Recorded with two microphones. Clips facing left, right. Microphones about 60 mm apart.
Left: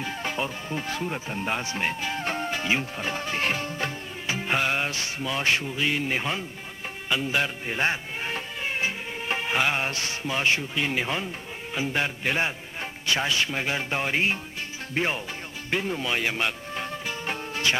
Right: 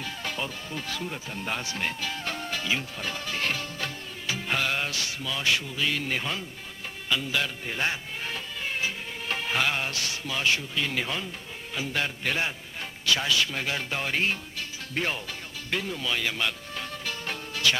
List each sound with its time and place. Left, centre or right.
0.0 s a man's voice: left
15.7 s music: left